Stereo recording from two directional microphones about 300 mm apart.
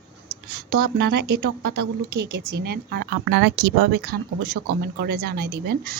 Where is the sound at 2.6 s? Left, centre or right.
Right.